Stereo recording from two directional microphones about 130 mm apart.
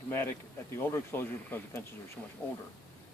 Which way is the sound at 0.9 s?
20° left (ahead or behind).